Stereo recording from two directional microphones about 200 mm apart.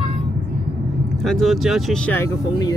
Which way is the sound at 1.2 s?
Centre (ahead or behind).